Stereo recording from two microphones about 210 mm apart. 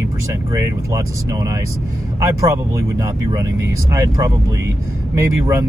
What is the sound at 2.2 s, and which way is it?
Speech, 15° right (ahead or behind).